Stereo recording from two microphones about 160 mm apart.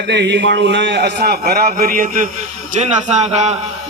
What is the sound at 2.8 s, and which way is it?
Speech, 45° right (ahead or behind).